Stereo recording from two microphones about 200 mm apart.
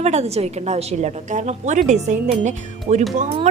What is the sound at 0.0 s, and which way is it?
A woman's voice, 35° right (ahead or behind).